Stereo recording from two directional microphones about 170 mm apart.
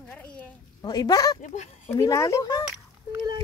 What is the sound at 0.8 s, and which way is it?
Speech, 25° left (ahead or behind).